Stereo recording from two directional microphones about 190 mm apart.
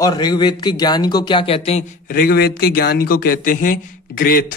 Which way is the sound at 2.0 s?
45° left (ahead or behind).